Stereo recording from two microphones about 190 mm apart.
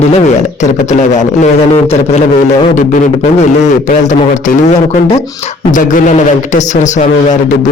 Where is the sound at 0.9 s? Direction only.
40° left (ahead or behind).